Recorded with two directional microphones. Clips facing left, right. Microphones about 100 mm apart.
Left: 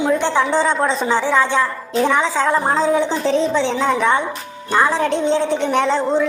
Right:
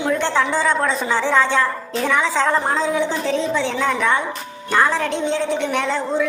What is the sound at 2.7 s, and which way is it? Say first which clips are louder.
A woman's voice: left 3 dB; 35° left (ahead or behind).